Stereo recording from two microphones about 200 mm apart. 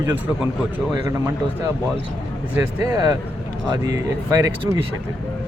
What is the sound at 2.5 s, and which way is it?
Speech, 20° right (ahead or behind).